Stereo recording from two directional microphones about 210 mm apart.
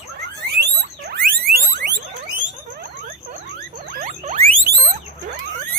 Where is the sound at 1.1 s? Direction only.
45° right (ahead or behind).